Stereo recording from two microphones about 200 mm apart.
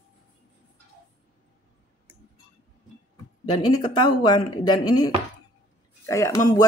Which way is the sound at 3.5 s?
25° left (ahead or behind).